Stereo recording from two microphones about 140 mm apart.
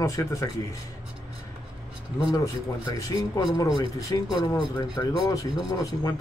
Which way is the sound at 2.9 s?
25° left (ahead or behind).